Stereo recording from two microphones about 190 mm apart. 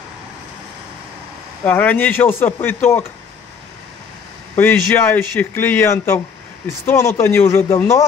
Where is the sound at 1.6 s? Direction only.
10° left (ahead or behind).